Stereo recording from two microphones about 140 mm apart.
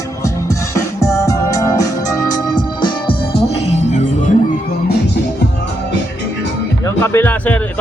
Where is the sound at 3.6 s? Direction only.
55° left (ahead or behind).